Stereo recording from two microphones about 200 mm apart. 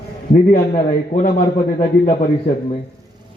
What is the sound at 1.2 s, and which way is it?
Speech, 40° left (ahead or behind).